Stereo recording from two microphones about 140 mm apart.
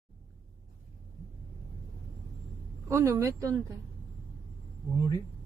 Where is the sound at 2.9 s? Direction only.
20° right (ahead or behind).